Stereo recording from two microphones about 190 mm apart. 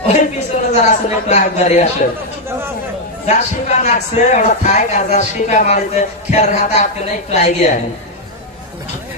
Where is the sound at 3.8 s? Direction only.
40° left (ahead or behind).